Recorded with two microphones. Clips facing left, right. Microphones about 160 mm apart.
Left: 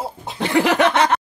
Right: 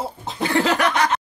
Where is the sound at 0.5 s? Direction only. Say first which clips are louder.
Left 4 dB; 15° left (ahead or behind).